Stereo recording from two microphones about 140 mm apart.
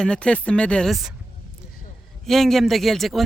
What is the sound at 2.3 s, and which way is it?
Speech, centre (ahead or behind).